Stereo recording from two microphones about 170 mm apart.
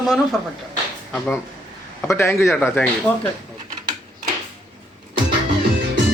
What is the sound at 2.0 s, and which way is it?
Speech, 15° left (ahead or behind).